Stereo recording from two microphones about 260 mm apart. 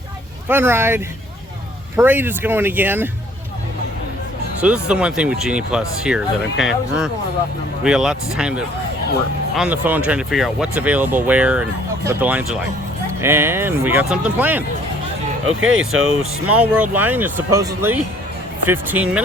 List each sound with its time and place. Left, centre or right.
0.4 s speech: centre
4.6 s speech: centre
15.4 s speech: right
16.6 s speech: centre